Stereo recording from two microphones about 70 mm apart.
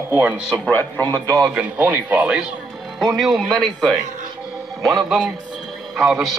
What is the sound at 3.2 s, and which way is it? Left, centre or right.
Speech, centre.